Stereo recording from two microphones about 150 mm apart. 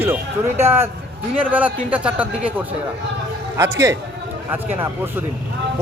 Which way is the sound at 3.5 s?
20° right (ahead or behind).